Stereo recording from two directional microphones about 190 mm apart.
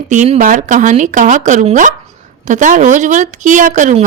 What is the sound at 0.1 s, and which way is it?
A woman's voice, 40° right (ahead or behind).